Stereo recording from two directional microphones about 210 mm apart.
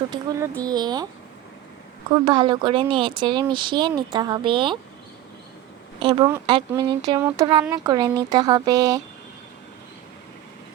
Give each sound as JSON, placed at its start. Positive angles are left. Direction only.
{"t": 0.1, "sound": "speech", "side_deg": -15}
{"t": 2.1, "sound": "speech", "side_deg": -20}
{"t": 6.0, "sound": "speech", "side_deg": -20}